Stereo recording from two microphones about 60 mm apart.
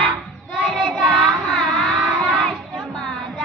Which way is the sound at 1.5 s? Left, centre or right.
Centre.